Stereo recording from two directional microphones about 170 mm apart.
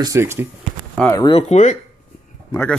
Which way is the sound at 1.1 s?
30° left (ahead or behind).